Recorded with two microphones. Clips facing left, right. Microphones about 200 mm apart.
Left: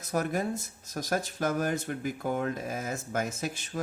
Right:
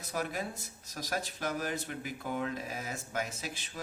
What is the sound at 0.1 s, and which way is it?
Speech, 45° left (ahead or behind).